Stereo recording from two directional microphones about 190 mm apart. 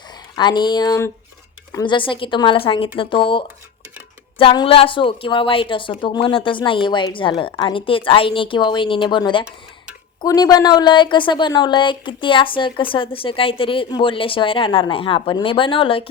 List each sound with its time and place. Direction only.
0.3 s a woman's voice: 25° left (ahead or behind)